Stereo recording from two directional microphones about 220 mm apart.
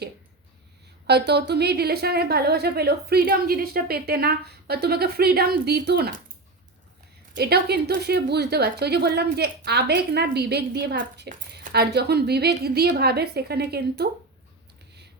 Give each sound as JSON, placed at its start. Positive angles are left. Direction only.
{"t": 1.0, "sound": "a woman's voice", "side_deg": -50}
{"t": 7.3, "sound": "a woman's voice", "side_deg": -45}